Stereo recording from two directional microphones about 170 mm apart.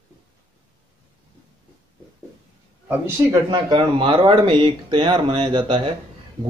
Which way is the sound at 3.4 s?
30° right (ahead or behind).